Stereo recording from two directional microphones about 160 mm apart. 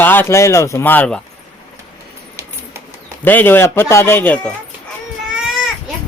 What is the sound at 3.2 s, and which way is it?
A man's voice, 10° left (ahead or behind).